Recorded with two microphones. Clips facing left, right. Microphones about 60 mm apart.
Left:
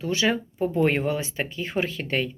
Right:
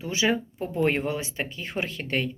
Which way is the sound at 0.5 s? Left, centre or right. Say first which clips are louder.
Left 3 dB; centre.